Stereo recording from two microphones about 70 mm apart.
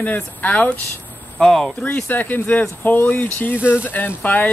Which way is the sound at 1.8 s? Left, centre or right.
Left.